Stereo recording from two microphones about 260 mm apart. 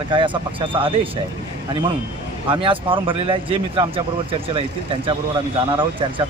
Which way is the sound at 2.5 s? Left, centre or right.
Centre.